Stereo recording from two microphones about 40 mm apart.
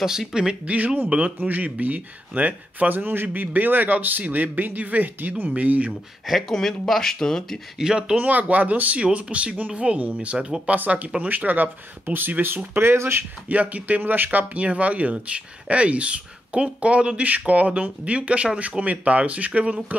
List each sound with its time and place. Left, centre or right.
0.0 s speech: centre
0.7 s speech: right
3.2 s speech: right
6.2 s speech: centre
7.8 s speech: centre
8.2 s speech: right
11.2 s speech: right
12.7 s speech: right
13.5 s speech: right